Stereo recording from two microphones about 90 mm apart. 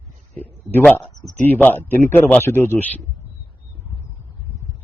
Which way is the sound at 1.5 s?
20° left (ahead or behind).